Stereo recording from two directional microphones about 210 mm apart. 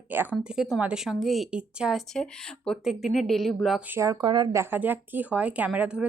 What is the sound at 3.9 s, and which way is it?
Speech, 15° right (ahead or behind).